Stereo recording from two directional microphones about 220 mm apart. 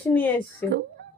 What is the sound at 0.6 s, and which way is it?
Speech, 10° left (ahead or behind).